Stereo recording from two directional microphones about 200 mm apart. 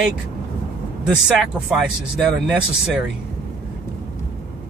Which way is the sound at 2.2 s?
Centre (ahead or behind).